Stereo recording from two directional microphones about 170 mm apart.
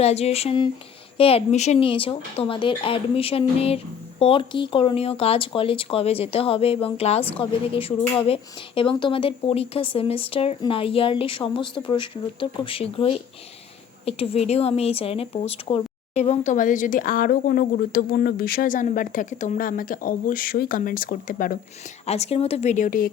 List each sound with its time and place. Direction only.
0.0 s speech: 40° left (ahead or behind); by 21.6 s 55° left (ahead or behind)
22.0 s speech: 40° left (ahead or behind); by 23.1 s 55° left (ahead or behind)